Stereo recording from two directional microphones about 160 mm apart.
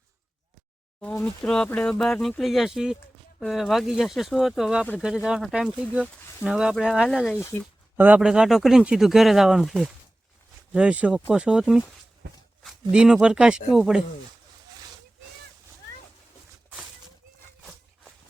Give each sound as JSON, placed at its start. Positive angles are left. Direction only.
{"t": 1.1, "sound": "speech", "side_deg": 10}
{"t": 7.3, "sound": "speech", "side_deg": 15}
{"t": 7.9, "sound": "speech", "side_deg": -10}